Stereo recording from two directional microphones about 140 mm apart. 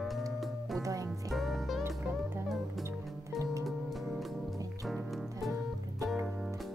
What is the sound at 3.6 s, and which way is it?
Music, centre (ahead or behind).